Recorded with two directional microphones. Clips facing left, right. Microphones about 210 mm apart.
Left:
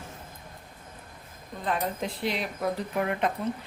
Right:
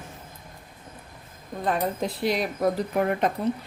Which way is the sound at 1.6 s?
40° right (ahead or behind).